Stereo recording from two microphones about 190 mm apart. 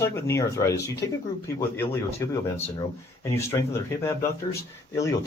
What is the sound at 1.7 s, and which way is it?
Speech, 15° left (ahead or behind).